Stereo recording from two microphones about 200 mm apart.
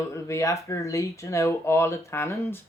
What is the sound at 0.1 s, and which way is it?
Speech, 15° left (ahead or behind).